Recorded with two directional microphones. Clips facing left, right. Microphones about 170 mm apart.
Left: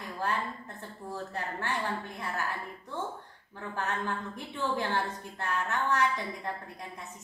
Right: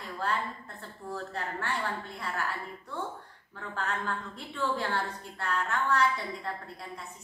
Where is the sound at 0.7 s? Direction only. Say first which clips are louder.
Right 2 dB; 15° left (ahead or behind).